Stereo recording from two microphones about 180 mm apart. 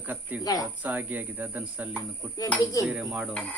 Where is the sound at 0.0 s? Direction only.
10° right (ahead or behind).